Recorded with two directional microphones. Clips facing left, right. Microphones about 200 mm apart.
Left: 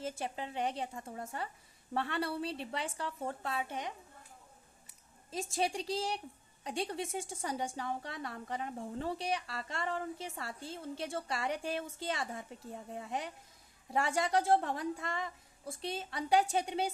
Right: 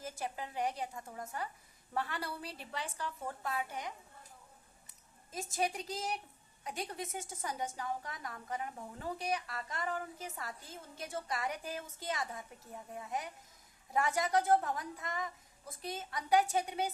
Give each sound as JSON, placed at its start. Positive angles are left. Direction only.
{"t": 0.0, "sound": "speech", "side_deg": 25}
{"t": 5.3, "sound": "a woman's voice", "side_deg": 30}